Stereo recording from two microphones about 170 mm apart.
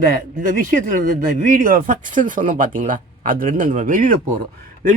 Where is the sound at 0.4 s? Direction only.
50° right (ahead or behind).